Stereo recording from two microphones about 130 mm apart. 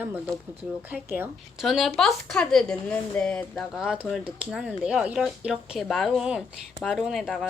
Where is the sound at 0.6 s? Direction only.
10° right (ahead or behind).